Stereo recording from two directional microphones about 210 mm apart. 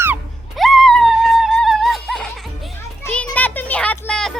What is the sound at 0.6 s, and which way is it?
Music, centre (ahead or behind).